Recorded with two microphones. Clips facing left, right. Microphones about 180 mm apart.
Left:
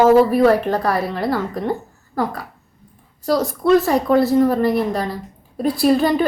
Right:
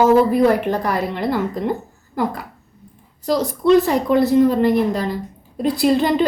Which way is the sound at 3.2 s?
20° right (ahead or behind).